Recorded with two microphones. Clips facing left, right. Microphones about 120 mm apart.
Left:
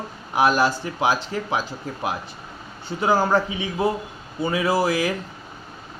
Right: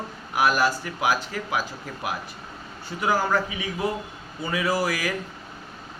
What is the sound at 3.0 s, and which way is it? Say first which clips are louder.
A man's voice: left 4 dB; 30° left (ahead or behind).